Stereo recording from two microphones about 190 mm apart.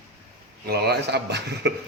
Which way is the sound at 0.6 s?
55° right (ahead or behind).